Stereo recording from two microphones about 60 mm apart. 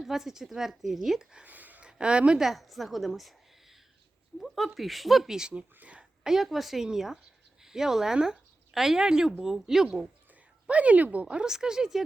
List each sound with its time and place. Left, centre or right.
0.0 s speech: centre
1.5 s a sound: right
1.9 s a woman's voice: centre
2.4 s a woman's voice: centre; by 6.1 s right
6.2 s speech: centre
10.7 s speech: right